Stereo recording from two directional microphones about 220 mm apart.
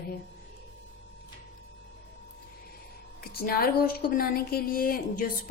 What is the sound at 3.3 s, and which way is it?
A woman's voice, 45° left (ahead or behind).